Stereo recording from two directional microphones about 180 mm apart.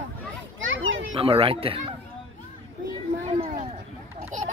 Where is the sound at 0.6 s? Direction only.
90° right.